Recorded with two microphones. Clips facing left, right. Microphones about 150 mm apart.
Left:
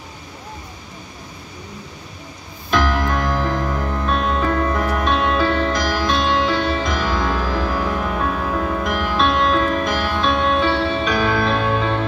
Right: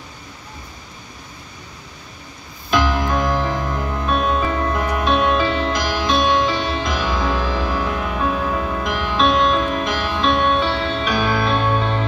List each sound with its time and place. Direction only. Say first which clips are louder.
2.7 s music: even; centre (ahead or behind)
3.3 s music: left 1 dB; centre (ahead or behind)